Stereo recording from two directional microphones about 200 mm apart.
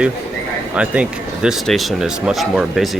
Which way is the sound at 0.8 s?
5° right (ahead or behind).